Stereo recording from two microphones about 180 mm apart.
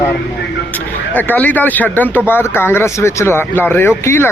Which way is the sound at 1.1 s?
10° left (ahead or behind).